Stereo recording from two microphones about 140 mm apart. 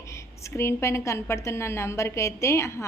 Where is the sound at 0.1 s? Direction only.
20° left (ahead or behind).